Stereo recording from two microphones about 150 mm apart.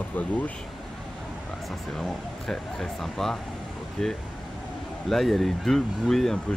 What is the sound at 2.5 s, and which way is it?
Speech, centre (ahead or behind).